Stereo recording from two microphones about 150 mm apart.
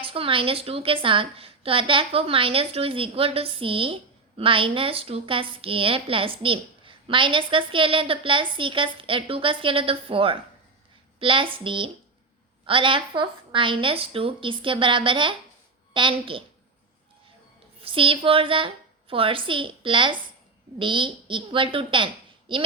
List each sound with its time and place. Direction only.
0.0 s a woman's voice: 35° right (ahead or behind)
17.8 s a woman's voice: 35° right (ahead or behind)